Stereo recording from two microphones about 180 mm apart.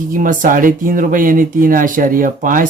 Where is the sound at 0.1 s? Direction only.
50° right (ahead or behind).